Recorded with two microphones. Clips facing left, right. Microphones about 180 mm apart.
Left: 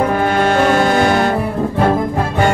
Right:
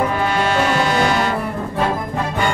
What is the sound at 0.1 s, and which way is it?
Music, 50° left (ahead or behind).